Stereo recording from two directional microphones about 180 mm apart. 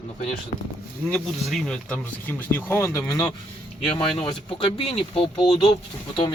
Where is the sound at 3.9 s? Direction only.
5° left (ahead or behind).